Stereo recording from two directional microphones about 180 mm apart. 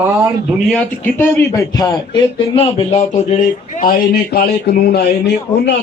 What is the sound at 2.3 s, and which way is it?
Speech, 30° left (ahead or behind).